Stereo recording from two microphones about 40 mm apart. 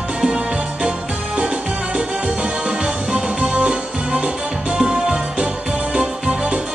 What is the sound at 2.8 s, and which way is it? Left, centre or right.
Music, right.